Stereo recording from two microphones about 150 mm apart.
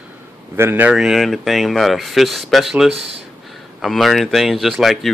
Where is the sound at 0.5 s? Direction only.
15° right (ahead or behind).